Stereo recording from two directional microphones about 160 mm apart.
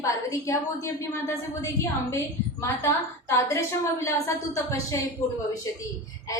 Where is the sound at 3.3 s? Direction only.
20° left (ahead or behind).